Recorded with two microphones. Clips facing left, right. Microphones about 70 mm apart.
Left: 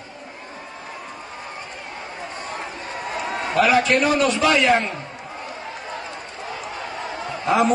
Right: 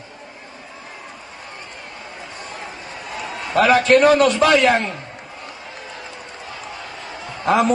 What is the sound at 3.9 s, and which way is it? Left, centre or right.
Speech, right.